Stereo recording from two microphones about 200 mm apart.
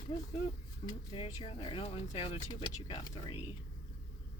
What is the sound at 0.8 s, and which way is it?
Speech, 25° left (ahead or behind).